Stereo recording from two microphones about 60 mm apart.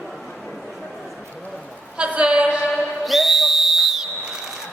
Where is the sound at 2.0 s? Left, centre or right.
Right.